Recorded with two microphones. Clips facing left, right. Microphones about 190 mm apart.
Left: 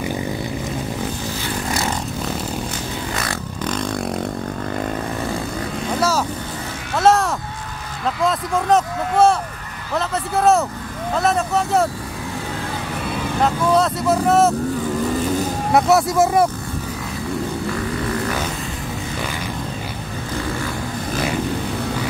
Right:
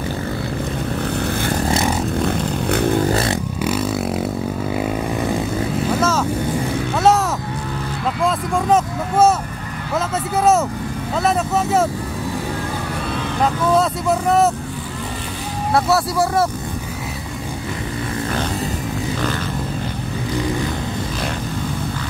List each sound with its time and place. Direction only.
2.7 s a sound: 60° right (ahead or behind)
3.6 s vehicle: 5° right (ahead or behind)
5.9 s boat: 10° left (ahead or behind)
7.0 s a sound: centre (ahead or behind)
8.2 s vehicle: centre (ahead or behind)
9.9 s speech: centre (ahead or behind)
13.4 s speech: centre (ahead or behind)
15.7 s speech: 20° left (ahead or behind)